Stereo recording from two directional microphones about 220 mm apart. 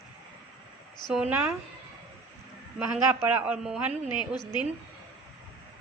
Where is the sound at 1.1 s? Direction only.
5° right (ahead or behind).